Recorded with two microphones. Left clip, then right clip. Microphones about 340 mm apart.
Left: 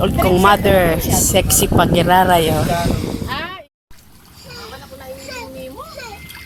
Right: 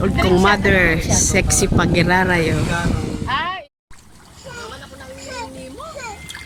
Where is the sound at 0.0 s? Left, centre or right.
Centre.